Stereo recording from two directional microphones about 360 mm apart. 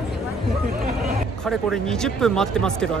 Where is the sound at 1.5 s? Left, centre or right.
Centre.